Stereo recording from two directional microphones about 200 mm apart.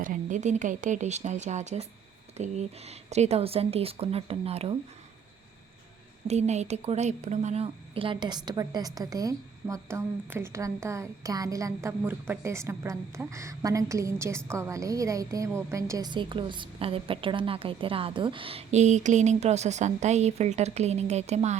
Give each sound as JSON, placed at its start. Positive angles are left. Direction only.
{"t": 0.0, "sound": "a woman's voice", "side_deg": -40}
{"t": 6.2, "sound": "a woman's voice", "side_deg": -35}